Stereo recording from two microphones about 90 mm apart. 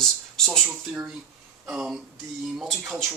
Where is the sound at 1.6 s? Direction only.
10° right (ahead or behind).